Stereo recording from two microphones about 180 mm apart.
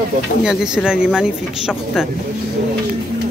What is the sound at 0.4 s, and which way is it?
Speech, 5° right (ahead or behind).